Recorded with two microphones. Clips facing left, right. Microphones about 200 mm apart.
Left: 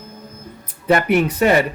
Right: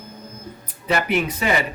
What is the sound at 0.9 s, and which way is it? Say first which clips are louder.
Speech: left 6 dB; 55° left (ahead or behind).